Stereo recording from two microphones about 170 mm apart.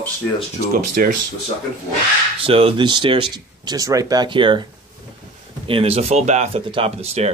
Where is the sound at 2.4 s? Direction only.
35° right (ahead or behind).